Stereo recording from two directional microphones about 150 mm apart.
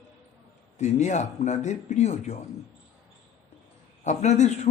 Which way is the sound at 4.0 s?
50° left (ahead or behind).